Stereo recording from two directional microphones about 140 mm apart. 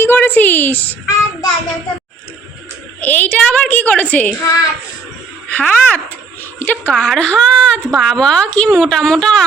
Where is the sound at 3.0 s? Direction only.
10° left (ahead or behind).